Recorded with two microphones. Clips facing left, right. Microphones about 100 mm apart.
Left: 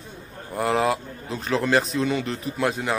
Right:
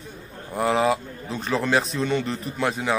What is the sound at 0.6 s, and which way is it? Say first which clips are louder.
Speech: right 1 dB; centre (ahead or behind).